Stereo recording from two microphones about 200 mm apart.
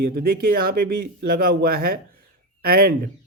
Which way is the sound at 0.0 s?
50° right (ahead or behind).